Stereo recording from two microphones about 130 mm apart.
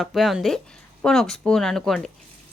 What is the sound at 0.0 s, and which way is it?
A woman's voice, centre (ahead or behind).